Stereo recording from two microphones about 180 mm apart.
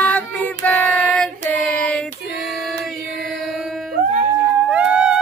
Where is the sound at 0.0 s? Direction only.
10° left (ahead or behind).